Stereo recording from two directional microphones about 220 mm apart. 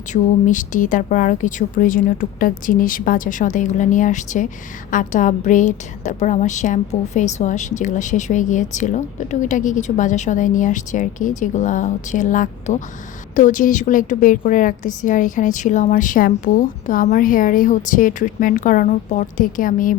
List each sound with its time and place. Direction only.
0.1 s a woman's voice: 35° left (ahead or behind)